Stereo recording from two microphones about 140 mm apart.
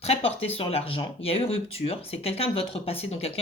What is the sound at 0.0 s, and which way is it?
Speech, 45° left (ahead or behind).